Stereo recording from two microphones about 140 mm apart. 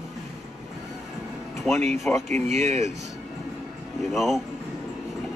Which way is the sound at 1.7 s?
55° right (ahead or behind).